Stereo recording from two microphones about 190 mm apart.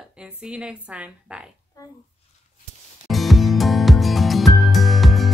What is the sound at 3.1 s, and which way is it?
Music, centre (ahead or behind).